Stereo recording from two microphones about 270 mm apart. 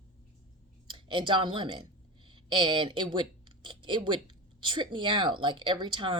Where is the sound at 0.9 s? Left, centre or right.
Centre.